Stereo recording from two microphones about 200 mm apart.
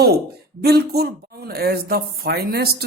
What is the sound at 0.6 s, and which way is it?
Speech, 50° right (ahead or behind).